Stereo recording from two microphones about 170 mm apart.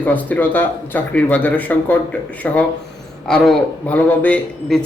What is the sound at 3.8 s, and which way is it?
Speech, 10° left (ahead or behind).